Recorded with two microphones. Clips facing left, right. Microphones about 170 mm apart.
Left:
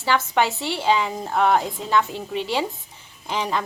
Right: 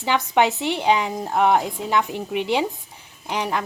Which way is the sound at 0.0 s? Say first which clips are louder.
Right 2 dB; 20° right (ahead or behind).